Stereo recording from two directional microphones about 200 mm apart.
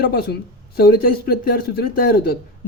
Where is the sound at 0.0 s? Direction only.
50° left (ahead or behind).